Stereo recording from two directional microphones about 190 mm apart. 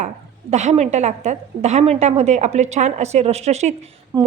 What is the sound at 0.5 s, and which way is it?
Speech, 35° right (ahead or behind).